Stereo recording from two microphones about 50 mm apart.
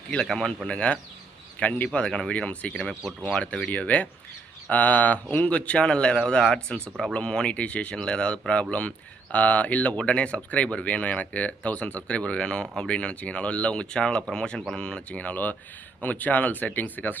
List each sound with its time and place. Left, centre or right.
0.1 s speech: centre; by 1.9 s left
1.9 s speech: centre
2.3 s speech: left
3.7 s speech: left
15.2 s speech: left